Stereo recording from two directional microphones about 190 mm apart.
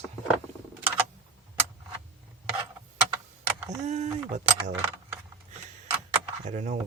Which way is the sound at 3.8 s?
35° right (ahead or behind).